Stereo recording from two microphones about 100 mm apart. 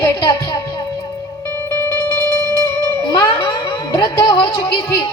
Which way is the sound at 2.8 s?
35° left (ahead or behind).